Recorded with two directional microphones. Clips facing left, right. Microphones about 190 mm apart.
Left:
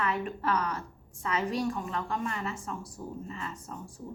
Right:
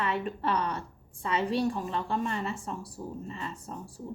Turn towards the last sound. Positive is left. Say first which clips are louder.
# right 1 dB
turn(degrees=-30)  # may be behind; listen again after turning